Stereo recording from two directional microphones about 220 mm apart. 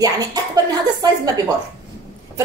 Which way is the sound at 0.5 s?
20° right (ahead or behind).